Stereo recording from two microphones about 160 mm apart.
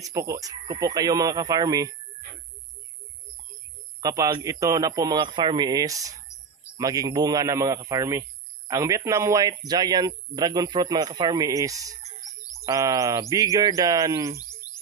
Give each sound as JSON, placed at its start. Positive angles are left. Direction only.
{"t": 0.0, "sound": "speech", "side_deg": -20}
{"t": 4.0, "sound": "speech", "side_deg": -20}